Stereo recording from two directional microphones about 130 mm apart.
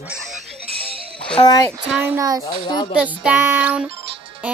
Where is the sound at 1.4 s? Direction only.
30° left (ahead or behind).